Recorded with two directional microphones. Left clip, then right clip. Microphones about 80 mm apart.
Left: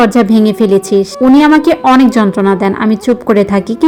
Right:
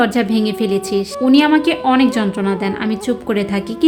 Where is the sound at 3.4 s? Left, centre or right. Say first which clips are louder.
Left 8 dB; left.